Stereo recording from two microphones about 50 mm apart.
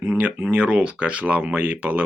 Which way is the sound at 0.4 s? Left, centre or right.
Right.